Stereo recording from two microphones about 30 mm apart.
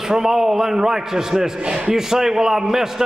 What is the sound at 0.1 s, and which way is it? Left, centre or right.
A man's voice, centre.